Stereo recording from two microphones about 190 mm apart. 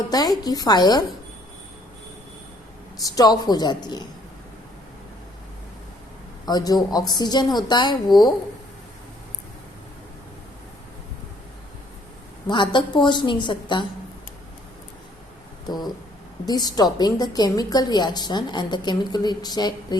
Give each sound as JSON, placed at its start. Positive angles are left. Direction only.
{"t": 0.1, "sound": "a woman's voice", "side_deg": 20}
{"t": 3.0, "sound": "a woman's voice", "side_deg": 20}
{"t": 6.4, "sound": "a woman's voice", "side_deg": 20}
{"t": 12.5, "sound": "a woman's voice", "side_deg": 25}
{"t": 15.6, "sound": "a woman's voice", "side_deg": 20}